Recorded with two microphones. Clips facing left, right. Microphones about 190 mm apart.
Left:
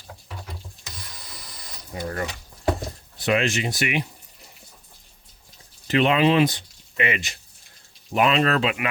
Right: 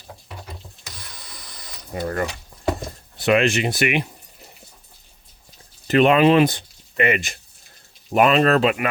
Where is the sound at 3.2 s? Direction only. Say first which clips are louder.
Right 5 dB; 60° right (ahead or behind).